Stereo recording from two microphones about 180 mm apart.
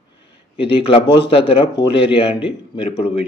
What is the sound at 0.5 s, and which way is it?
A man's voice, 30° left (ahead or behind).